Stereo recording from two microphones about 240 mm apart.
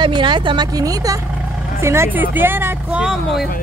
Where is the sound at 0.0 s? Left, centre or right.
Centre.